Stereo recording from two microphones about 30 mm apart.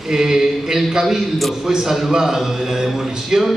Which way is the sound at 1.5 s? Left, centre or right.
Centre.